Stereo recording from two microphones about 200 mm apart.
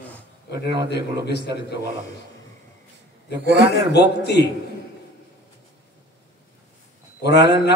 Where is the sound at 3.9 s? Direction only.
55° left (ahead or behind).